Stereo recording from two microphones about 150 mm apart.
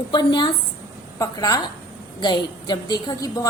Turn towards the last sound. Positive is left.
turn(degrees=30)  # may be behind; listen again after turning